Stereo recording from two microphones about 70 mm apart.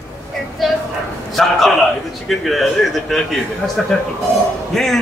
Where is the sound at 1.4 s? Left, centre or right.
Centre.